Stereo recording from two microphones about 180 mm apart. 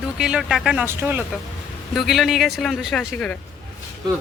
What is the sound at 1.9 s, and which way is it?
Speech, centre (ahead or behind).